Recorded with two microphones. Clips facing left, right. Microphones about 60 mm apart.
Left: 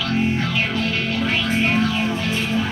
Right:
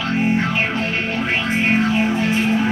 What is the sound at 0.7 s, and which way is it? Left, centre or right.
Music, right.